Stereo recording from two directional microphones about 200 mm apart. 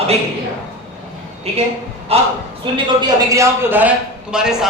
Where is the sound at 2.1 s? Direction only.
30° right (ahead or behind).